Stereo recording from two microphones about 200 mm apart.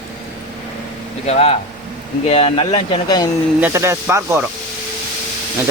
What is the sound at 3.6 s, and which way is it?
Speech, 15° right (ahead or behind).